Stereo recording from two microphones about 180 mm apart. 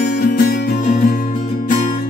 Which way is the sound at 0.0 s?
60° left (ahead or behind).